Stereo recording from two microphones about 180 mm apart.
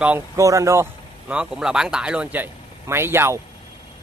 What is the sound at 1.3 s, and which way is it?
Speech, 5° right (ahead or behind).